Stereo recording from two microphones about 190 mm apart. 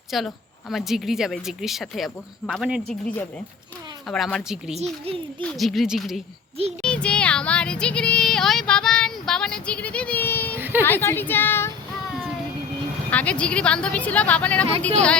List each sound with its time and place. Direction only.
0.1 s speech: centre (ahead or behind)
4.1 s speech: 5° left (ahead or behind)
4.7 s a child's voice: 35° right (ahead or behind)
5.4 s speech: centre (ahead or behind)
10.6 s a sound: 10° right (ahead or behind)
10.8 s a woman's voice: 10° left (ahead or behind)
13.1 s a woman's voice: 5° left (ahead or behind)